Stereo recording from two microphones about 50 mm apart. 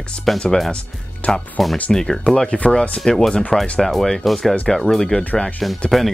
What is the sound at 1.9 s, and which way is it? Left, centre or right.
Speech, centre.